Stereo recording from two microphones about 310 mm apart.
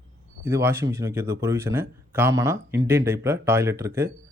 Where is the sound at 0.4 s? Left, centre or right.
Centre.